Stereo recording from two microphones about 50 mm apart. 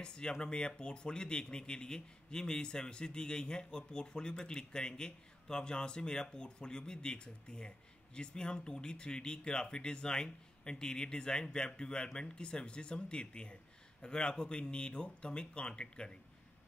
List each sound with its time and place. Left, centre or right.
0.0 s speech: centre